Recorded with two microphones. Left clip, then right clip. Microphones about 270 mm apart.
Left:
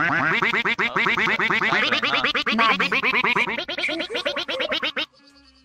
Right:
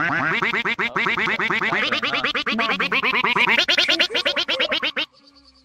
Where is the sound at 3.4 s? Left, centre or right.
Right.